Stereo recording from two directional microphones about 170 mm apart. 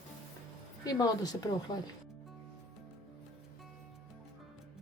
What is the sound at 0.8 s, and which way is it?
Speech, 20° left (ahead or behind).